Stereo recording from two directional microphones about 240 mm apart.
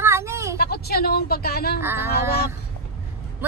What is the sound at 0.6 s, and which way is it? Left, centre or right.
Speech, left.